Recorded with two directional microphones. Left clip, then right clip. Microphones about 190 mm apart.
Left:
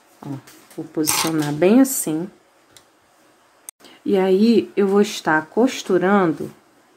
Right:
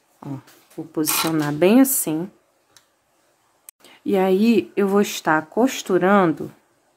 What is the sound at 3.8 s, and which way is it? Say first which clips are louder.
Speech: left 1 dB; 10° right (ahead or behind).